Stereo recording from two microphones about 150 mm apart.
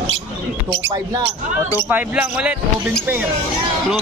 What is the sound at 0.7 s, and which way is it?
Speech, 30° right (ahead or behind).